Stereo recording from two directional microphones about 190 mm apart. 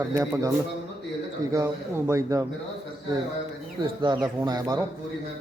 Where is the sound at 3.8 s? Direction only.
25° right (ahead or behind).